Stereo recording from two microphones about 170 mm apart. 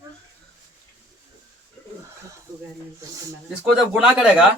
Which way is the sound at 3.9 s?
5° right (ahead or behind).